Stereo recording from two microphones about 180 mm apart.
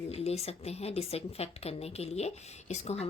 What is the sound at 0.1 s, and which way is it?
Speech, 35° left (ahead or behind).